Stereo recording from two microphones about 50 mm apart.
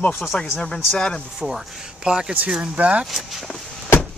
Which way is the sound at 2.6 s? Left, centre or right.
Right.